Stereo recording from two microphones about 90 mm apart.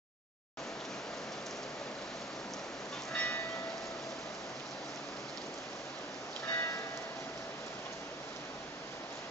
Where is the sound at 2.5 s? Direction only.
5° left (ahead or behind).